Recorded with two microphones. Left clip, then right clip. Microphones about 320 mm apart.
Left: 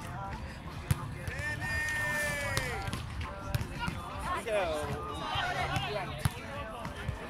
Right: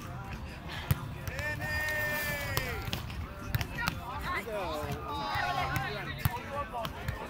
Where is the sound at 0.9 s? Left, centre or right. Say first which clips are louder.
Even; centre.